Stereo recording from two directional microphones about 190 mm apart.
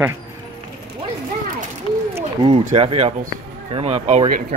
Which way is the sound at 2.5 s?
35° right (ahead or behind).